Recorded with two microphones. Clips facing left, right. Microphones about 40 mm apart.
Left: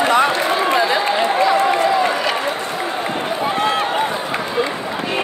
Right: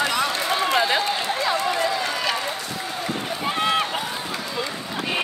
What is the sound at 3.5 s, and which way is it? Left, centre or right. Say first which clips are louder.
Run: left 3 dB; left.